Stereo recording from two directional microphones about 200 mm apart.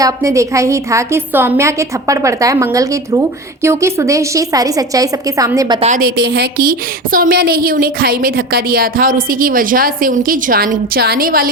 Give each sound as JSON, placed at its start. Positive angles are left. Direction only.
{"t": 0.0, "sound": "a woman's voice", "side_deg": -15}
{"t": 5.8, "sound": "a woman's voice", "side_deg": -45}